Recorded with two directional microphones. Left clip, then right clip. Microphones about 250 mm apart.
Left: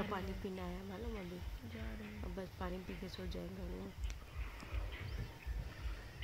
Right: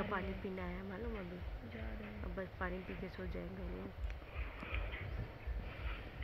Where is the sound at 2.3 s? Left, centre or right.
Left.